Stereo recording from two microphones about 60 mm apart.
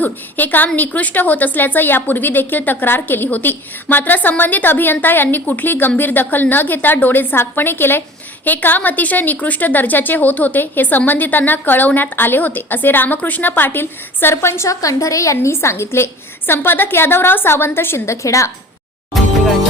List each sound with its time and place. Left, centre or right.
0.0 s a woman's voice: left